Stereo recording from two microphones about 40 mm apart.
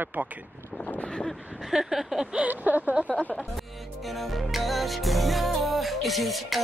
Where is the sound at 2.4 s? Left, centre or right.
Right.